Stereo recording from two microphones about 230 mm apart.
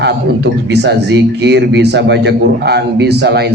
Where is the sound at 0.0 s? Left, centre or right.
Right.